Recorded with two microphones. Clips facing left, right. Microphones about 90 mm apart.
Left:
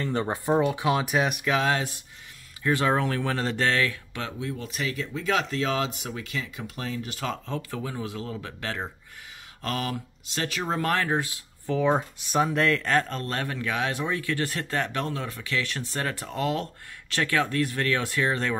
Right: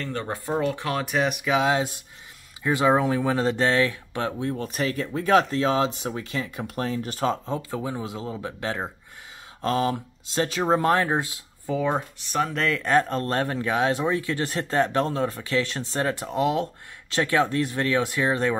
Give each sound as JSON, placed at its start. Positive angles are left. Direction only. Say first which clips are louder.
{"t": 0.0, "sound": "speech", "louder": "left 3 dB", "side_deg": 20}
{"t": 2.6, "sound": "speech", "louder": "right 3 dB", "side_deg": -15}
{"t": 11.9, "sound": "speech", "louder": "left 2 dB", "side_deg": 10}
{"t": 12.8, "sound": "speech", "louder": "right 4 dB", "side_deg": -20}
{"t": 13.2, "sound": "speech", "louder": "right 5 dB", "side_deg": -35}